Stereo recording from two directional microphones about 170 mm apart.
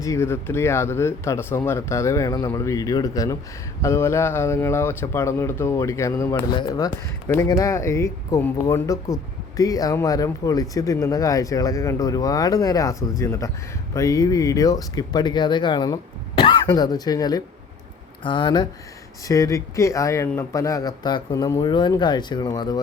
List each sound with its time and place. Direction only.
0.0 s speech: 15° left (ahead or behind)